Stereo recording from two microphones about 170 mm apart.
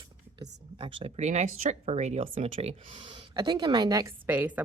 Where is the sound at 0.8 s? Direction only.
30° right (ahead or behind).